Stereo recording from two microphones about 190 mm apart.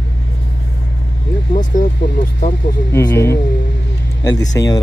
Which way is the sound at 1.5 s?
40° left (ahead or behind).